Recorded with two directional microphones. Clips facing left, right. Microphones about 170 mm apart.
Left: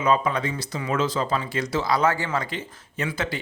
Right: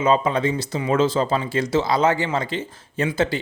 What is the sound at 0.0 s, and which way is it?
Speech, 25° right (ahead or behind).